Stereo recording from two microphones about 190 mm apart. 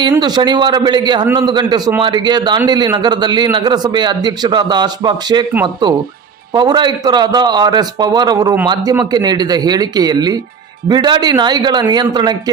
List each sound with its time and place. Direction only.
0.2 s a man's voice: 20° right (ahead or behind)
6.5 s a man's voice: 25° right (ahead or behind)